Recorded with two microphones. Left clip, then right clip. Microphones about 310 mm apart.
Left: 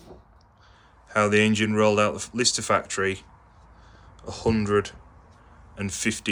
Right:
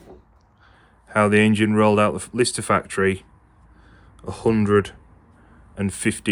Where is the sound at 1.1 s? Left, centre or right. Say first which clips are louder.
Right 3 dB; right.